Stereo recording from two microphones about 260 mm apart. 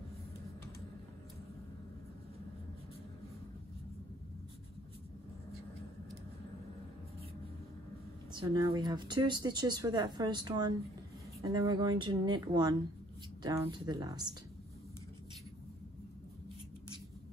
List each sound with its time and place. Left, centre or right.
8.3 s speech: centre